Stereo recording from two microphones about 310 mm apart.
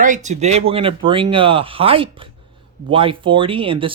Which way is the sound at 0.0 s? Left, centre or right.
Right.